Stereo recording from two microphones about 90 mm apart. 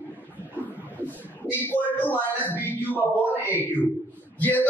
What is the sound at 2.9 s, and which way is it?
Speech, 20° right (ahead or behind).